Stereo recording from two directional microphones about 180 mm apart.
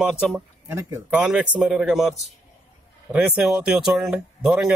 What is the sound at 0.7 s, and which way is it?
A man's voice, 15° right (ahead or behind).